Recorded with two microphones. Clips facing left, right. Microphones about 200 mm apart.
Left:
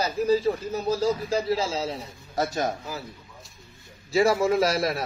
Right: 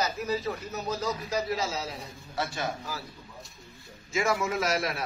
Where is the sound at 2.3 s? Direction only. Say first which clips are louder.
Left 6 dB; 40° left (ahead or behind).